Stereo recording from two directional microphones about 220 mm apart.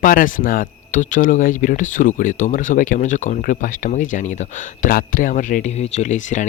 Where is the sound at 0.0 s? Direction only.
40° left (ahead or behind).